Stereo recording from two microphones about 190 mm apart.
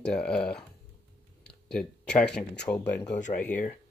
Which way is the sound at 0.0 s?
5° left (ahead or behind).